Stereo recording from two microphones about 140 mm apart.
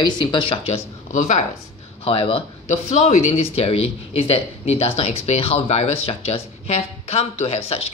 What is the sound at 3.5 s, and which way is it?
Speech, 45° left (ahead or behind).